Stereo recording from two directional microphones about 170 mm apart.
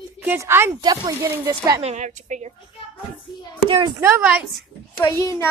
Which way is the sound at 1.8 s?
45° right (ahead or behind).